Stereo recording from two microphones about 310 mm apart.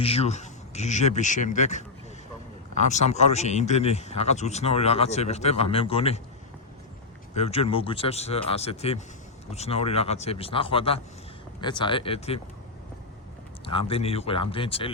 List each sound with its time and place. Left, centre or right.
0.0 s a man's voice: centre
2.9 s a man's voice: left
7.3 s a man's voice: centre
13.7 s speech: centre